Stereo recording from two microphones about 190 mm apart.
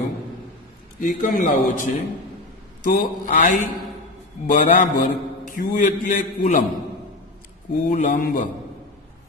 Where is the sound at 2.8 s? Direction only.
45° left (ahead or behind).